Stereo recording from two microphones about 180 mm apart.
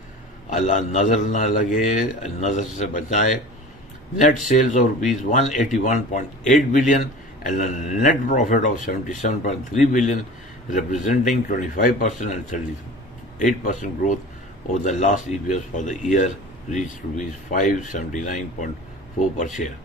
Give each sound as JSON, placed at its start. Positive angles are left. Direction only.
{"t": 0.5, "sound": "speech", "side_deg": 40}
{"t": 4.5, "sound": "speech", "side_deg": 45}